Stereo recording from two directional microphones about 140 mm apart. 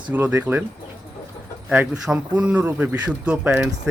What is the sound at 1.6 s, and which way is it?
Speech, 10° right (ahead or behind).